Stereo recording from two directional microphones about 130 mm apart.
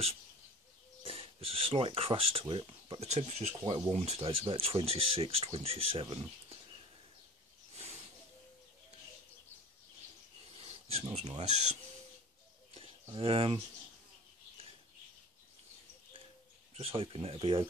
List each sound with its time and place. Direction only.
1.0 s speech: 45° right (ahead or behind)
3.0 s speech: 55° right (ahead or behind)
10.6 s a sound: 50° right (ahead or behind)
11.1 s speech: 60° right (ahead or behind)
13.1 s speech: 45° right (ahead or behind)
16.7 s speech: 45° right (ahead or behind)